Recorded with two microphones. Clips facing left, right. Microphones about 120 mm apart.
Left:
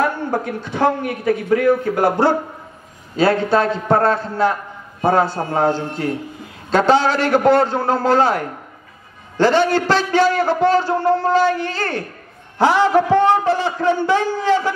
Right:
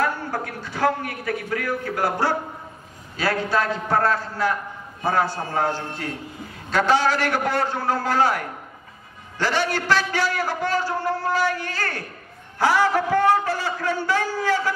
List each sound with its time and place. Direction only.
0.0 s a man's voice: 20° left (ahead or behind)